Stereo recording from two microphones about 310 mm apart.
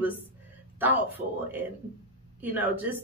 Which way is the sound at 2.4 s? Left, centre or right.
Centre.